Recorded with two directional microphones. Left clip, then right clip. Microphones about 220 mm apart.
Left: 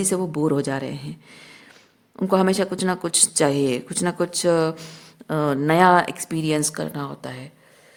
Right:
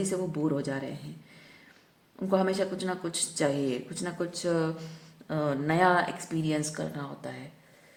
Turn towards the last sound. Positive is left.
turn(degrees=45)  # may be behind; listen again after turning